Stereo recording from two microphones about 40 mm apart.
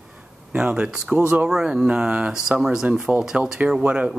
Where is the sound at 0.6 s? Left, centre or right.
Right.